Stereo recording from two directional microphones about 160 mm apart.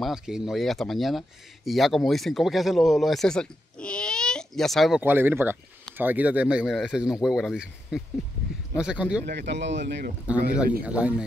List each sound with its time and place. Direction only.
0.0 s speech: centre (ahead or behind)
5.0 s speech: 10° right (ahead or behind)
9.2 s speech: 90° right
10.9 s speech: 10° right (ahead or behind)